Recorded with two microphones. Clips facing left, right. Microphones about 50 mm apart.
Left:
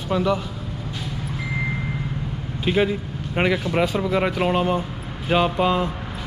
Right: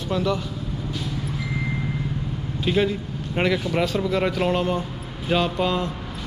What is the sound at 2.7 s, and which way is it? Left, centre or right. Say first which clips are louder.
Speech: left 1 dB; centre.